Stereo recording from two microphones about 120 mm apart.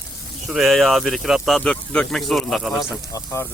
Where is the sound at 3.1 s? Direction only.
25° left (ahead or behind).